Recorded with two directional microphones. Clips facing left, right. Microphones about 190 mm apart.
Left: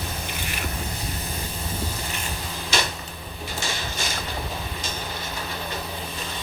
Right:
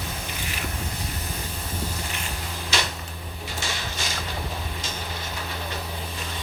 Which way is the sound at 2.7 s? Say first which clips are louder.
Left 2 dB; 50° left (ahead or behind).